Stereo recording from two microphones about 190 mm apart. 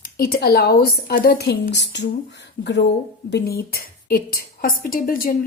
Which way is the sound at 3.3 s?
55° left (ahead or behind).